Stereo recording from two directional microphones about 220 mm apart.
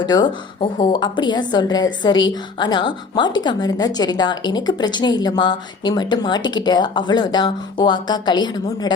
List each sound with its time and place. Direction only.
0.0 s a woman's voice: 20° left (ahead or behind)